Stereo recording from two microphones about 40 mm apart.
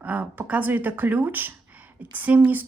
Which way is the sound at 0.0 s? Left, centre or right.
Right.